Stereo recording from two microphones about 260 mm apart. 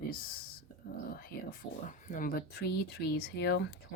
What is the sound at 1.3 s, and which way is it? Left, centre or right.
Speech, left.